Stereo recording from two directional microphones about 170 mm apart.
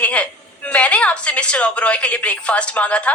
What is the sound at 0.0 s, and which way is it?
A woman's voice, 5° left (ahead or behind).